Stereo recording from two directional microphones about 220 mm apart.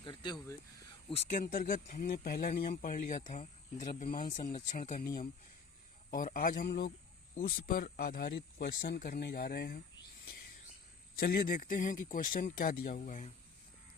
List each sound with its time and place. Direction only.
0.0 s a sound: 20° left (ahead or behind)
1.1 s speech: 30° left (ahead or behind)
11.2 s speech: 40° left (ahead or behind)